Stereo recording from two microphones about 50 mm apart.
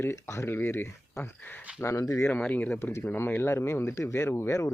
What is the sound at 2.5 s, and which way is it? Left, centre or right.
Speech, left.